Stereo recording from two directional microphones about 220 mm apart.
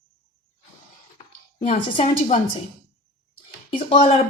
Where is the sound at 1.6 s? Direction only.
30° left (ahead or behind).